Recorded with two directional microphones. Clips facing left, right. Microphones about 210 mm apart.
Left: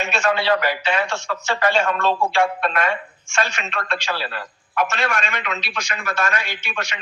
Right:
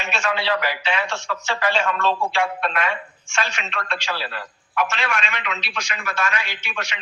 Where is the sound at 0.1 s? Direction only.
45° left (ahead or behind).